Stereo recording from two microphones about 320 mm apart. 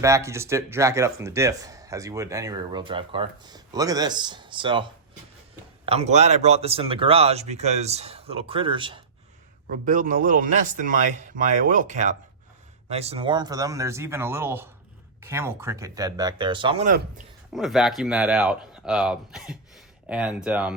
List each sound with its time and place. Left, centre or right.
0.0 s speech: centre
9.6 s speech: right
17.5 s speech: centre